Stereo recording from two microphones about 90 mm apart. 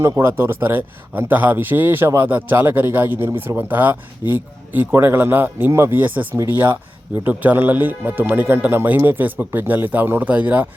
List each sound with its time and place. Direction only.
0.0 s speech: 25° right (ahead or behind)